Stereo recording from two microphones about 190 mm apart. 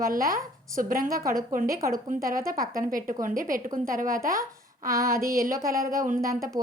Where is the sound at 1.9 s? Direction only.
45° right (ahead or behind).